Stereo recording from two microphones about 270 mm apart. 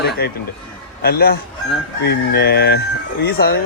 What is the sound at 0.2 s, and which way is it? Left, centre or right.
Speech, left.